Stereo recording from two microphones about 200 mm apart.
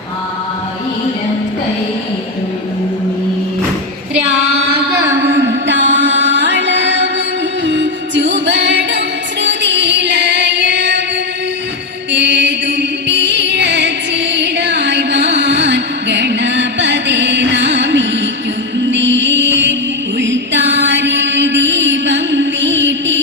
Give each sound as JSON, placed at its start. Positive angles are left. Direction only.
{"t": 5.3, "sound": "music", "side_deg": -65}
{"t": 12.1, "sound": "music", "side_deg": -60}
{"t": 20.1, "sound": "mantra", "side_deg": -65}